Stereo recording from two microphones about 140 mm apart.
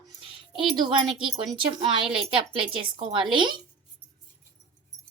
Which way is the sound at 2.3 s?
35° right (ahead or behind).